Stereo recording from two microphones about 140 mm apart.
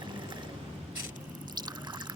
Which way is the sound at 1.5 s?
30° right (ahead or behind).